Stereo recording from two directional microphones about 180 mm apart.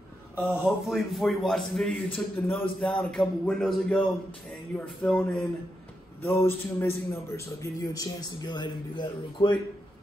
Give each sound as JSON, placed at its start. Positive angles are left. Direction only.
{"t": 0.5, "sound": "a man's voice", "side_deg": -5}